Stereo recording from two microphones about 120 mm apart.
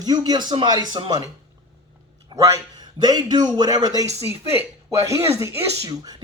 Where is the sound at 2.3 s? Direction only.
25° right (ahead or behind).